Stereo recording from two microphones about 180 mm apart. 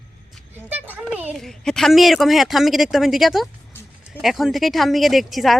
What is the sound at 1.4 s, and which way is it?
Speech, centre (ahead or behind).